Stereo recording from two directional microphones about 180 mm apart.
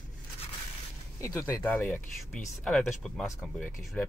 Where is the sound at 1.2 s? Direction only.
15° left (ahead or behind).